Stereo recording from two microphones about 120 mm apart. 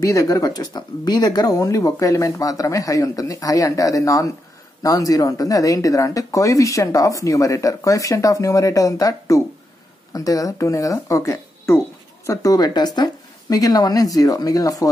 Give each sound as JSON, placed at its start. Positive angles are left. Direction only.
{"t": 0.0, "sound": "speech", "side_deg": 30}